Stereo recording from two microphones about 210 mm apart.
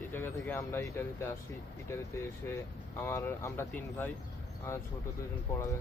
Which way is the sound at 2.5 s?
10° left (ahead or behind).